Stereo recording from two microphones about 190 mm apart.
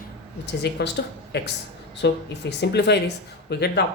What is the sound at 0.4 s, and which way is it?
Speech, 60° left (ahead or behind).